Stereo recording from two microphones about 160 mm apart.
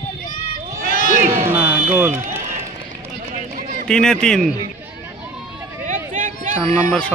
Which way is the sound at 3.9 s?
5° left (ahead or behind).